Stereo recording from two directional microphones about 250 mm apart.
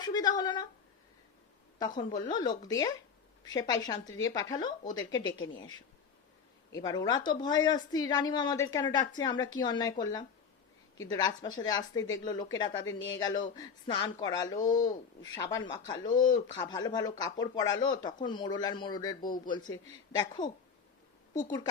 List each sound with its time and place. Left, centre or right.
0.0 s speech: centre
1.8 s speech: centre